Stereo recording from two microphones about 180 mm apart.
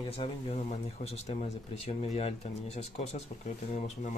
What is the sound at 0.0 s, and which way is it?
Speech, 30° left (ahead or behind).